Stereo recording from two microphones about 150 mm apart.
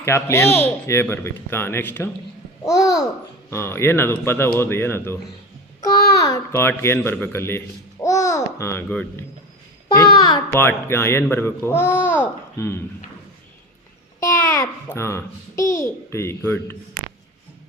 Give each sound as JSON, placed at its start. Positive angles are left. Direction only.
{"t": 0.0, "sound": "a child's voice", "side_deg": 20}
{"t": 8.0, "sound": "babbling", "side_deg": 20}
{"t": 9.9, "sound": "a child's voice", "side_deg": 25}
{"t": 10.5, "sound": "speech", "side_deg": 15}
{"t": 14.2, "sound": "a child's voice", "side_deg": 20}